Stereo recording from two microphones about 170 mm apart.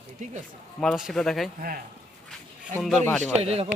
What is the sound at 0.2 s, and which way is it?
Speech, 45° right (ahead or behind).